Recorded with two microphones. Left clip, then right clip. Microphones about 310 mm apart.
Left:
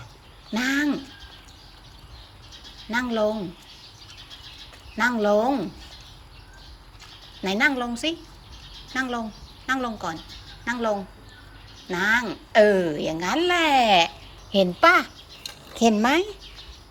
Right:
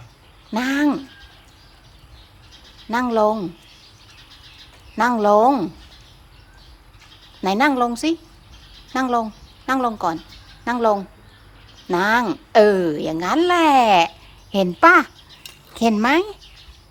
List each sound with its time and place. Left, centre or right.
0.5 s a woman's voice: centre
2.9 s a woman's voice: centre
4.9 s a woman's voice: centre
7.4 s a woman's voice: centre